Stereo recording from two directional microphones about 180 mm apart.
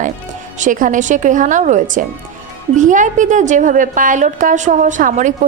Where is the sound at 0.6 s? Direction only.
45° right (ahead or behind).